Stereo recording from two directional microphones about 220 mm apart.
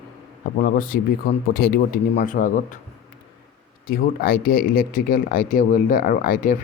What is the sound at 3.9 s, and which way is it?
Speech, 40° left (ahead or behind).